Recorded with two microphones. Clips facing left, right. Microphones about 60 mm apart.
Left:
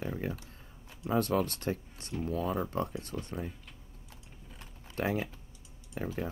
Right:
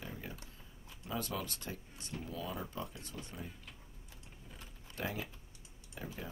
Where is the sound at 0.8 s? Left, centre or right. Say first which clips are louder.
Left 11 dB; left.